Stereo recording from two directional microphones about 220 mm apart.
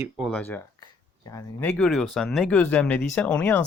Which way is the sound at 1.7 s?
5° left (ahead or behind).